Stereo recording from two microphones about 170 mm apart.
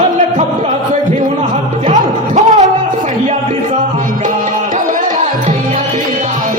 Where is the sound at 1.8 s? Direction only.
45° right (ahead or behind).